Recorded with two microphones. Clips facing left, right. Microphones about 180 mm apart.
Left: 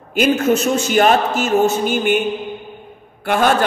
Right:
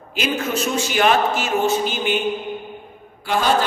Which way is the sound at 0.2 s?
45° left (ahead or behind).